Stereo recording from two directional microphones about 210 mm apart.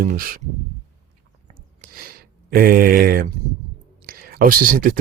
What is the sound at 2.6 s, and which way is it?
Speech, 45° right (ahead or behind).